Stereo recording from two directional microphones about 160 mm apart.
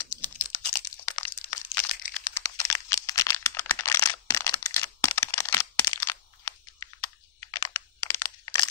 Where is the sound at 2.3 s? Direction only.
15° left (ahead or behind).